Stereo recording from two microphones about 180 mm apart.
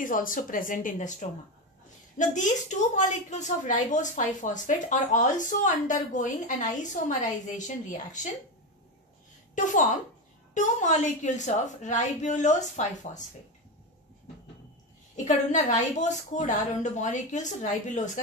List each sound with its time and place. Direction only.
0.0 s a woman's voice: 50° left (ahead or behind)
2.1 s a woman's voice: 45° left (ahead or behind)
10.5 s a woman's voice: 40° left (ahead or behind)
15.2 s a woman's voice: 40° left (ahead or behind)